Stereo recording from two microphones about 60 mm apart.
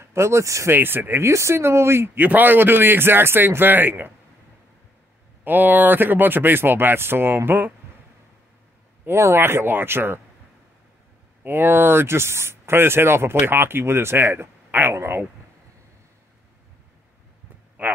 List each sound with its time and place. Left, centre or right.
0.0 s speech: right
0.7 s speech: right
1.3 s speech: right
2.1 s speech: right
5.4 s speech: right
9.2 s speech: right
11.4 s speech: right
17.8 s speech: right